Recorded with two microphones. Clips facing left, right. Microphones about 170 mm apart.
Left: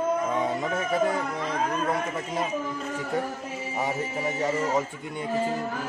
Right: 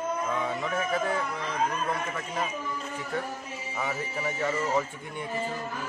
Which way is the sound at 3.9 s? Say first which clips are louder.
Left 4 dB; 20° left (ahead or behind).